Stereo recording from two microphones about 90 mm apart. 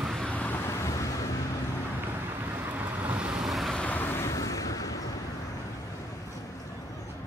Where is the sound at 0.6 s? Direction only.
35° left (ahead or behind).